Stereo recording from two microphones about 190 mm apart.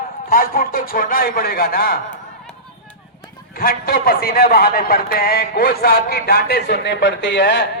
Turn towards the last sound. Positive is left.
turn(degrees=65)  # may be behind; listen again after turning